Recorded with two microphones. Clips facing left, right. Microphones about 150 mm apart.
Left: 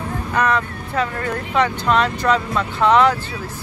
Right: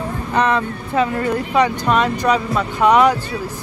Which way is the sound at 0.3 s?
25° right (ahead or behind).